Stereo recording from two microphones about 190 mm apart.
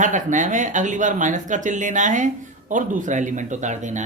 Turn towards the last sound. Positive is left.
turn(degrees=-40)  # may be behind; listen again after turning